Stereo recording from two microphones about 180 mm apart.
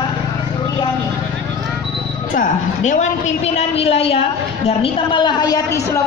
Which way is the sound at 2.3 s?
45° left (ahead or behind).